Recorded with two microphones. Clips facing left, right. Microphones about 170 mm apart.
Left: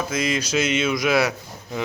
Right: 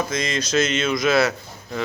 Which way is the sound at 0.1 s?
5° left (ahead or behind).